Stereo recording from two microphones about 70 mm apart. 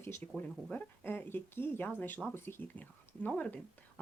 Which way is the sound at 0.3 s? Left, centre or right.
Left.